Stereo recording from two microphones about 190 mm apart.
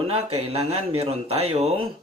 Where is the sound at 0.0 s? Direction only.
30° right (ahead or behind).